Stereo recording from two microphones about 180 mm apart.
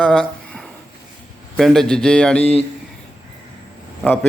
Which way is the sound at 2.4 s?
35° left (ahead or behind).